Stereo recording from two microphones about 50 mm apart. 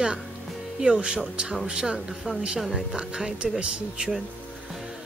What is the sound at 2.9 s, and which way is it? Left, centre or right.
Speech, centre.